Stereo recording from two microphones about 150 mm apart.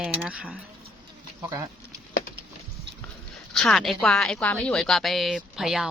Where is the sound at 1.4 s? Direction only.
25° right (ahead or behind).